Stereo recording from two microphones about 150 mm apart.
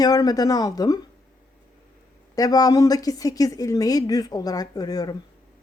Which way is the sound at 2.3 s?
25° left (ahead or behind).